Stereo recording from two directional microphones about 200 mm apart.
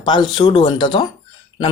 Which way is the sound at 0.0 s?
20° left (ahead or behind).